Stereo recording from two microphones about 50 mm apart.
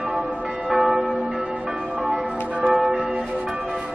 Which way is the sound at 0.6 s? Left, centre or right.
Centre.